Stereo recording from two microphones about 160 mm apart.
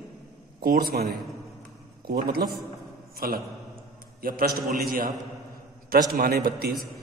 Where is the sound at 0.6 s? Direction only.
70° right (ahead or behind).